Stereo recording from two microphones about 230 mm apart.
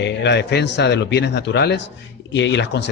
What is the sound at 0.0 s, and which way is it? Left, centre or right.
Speech, left.